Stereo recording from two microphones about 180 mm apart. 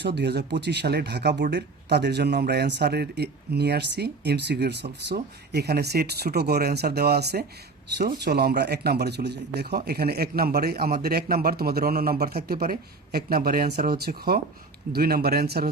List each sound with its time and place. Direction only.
0.0 s speech: 65° right (ahead or behind)